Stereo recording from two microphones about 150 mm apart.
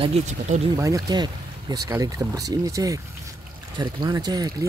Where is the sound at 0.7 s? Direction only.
20° right (ahead or behind).